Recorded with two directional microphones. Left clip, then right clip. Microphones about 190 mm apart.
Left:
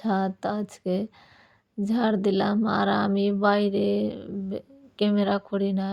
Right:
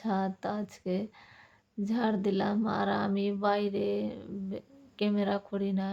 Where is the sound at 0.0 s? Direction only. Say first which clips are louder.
Left 6 dB; 35° left (ahead or behind).